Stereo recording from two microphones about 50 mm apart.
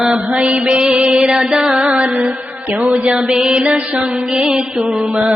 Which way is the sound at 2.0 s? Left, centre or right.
Right.